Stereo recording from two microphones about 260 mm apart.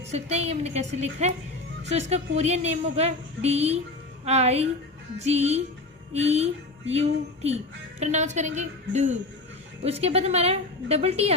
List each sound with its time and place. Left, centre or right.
0.1 s a woman's voice: right